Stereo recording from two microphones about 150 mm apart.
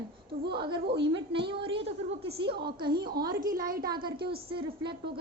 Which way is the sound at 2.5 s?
90° right.